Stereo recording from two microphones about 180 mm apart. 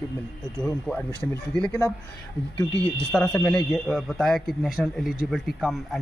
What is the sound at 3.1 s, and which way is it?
Speech, 10° left (ahead or behind).